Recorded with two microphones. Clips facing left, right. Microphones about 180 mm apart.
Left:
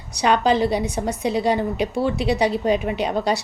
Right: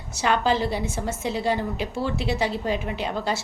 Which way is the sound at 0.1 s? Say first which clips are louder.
Left 4 dB; 15° left (ahead or behind).